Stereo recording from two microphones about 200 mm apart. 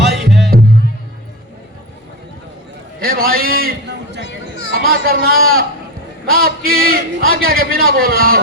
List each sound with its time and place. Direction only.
0.0 s music: centre (ahead or behind)
3.0 s a man's voice: 45° right (ahead or behind)
4.2 s a sound: 65° left (ahead or behind)
4.7 s a man's voice: 45° right (ahead or behind)